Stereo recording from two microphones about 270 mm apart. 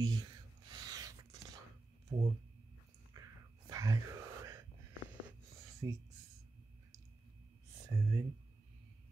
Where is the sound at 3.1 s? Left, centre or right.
Centre.